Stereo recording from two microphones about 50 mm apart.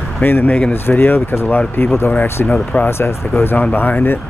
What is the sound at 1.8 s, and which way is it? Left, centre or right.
Speech, left.